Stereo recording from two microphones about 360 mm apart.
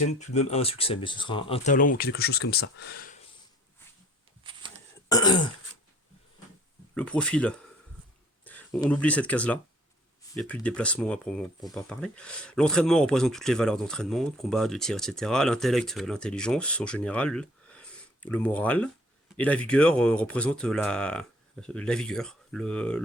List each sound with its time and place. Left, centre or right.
0.3 s speech: centre
4.4 s a sound: centre
5.0 s throat clearing: centre
6.9 s speech: centre